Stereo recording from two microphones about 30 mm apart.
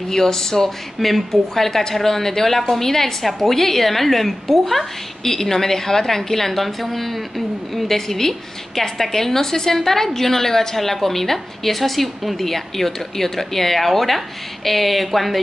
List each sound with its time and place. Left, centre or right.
0.1 s speech: centre
0.9 s speech: centre
15.1 s a sound: centre